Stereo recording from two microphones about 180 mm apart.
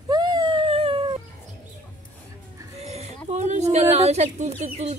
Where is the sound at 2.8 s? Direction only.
35° right (ahead or behind).